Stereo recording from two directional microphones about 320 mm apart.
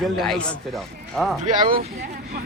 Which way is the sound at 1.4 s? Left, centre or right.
Right.